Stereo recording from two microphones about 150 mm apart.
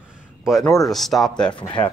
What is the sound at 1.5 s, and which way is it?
Speech, 35° left (ahead or behind).